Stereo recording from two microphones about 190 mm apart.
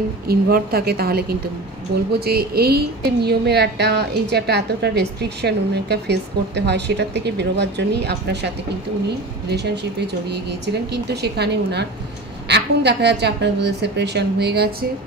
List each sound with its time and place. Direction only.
0.3 s a woman's voice: 55° right (ahead or behind)
9.5 s a woman's voice: 60° right (ahead or behind)